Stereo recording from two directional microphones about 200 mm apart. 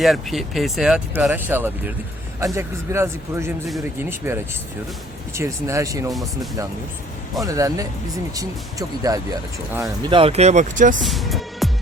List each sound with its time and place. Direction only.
0.0 s speech: centre (ahead or behind); by 6.1 s 15° right (ahead or behind)
6.1 s speech: centre (ahead or behind)
7.4 s speech: 15° right (ahead or behind)
9.1 s speech: 15° right (ahead or behind); by 10.9 s 40° right (ahead or behind)
11.0 s speech: centre (ahead or behind)